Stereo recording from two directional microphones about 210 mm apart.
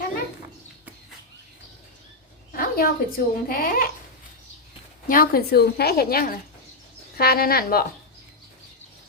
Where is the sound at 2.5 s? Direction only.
45° left (ahead or behind).